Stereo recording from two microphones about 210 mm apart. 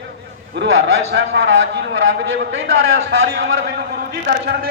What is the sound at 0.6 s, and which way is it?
A man's voice, 60° right (ahead or behind).